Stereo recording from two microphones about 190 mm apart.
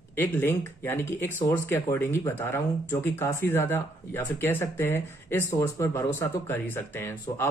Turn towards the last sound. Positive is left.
turn(degrees=10)  # may be behind; listen again after turning